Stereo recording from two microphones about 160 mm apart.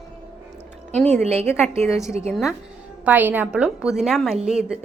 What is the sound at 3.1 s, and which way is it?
A woman's voice, 10° right (ahead or behind).